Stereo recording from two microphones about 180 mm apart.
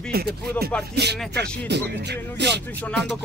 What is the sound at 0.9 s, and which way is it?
Music, 65° right (ahead or behind).